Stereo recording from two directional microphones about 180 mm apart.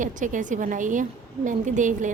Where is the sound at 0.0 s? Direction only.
45° right (ahead or behind).